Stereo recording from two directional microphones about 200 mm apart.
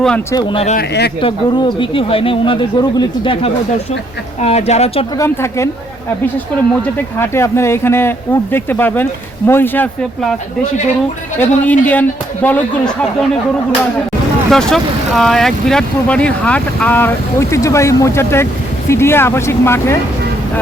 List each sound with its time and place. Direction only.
0.0 s speech: 5° left (ahead or behind)
0.3 s speech: 25° left (ahead or behind)
0.8 s speech: 55° left (ahead or behind)
1.2 s speech: 25° left (ahead or behind)
5.1 s speech: 15° left (ahead or behind)
7.2 s speech: 15° left (ahead or behind)
11.3 s speech: 10° left (ahead or behind)
14.5 s speech: centre (ahead or behind)